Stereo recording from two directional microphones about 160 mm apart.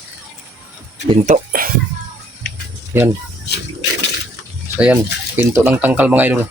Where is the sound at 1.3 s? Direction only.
60° right (ahead or behind).